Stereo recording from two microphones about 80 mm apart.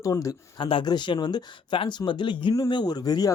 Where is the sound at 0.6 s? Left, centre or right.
Left.